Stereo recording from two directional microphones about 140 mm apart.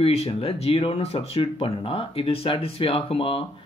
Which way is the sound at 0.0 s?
45° left (ahead or behind).